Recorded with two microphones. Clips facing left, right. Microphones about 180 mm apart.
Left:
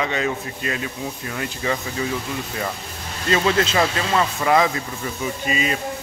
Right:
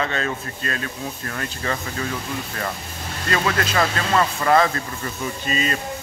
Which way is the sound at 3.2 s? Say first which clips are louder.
Left 3 dB; 25° left (ahead or behind).